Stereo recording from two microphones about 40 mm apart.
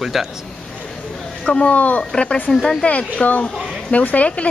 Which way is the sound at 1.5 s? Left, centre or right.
Left.